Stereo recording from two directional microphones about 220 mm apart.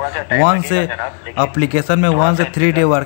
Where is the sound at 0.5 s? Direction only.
20° left (ahead or behind).